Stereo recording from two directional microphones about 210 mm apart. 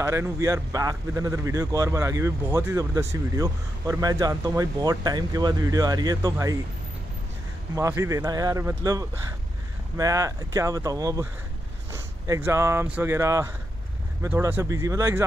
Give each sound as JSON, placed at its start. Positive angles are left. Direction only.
{"t": 0.0, "sound": "a man's voice", "side_deg": -15}
{"t": 7.7, "sound": "a man's voice", "side_deg": -15}